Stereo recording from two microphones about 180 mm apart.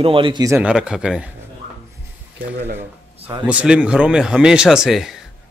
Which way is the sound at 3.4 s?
5° right (ahead or behind).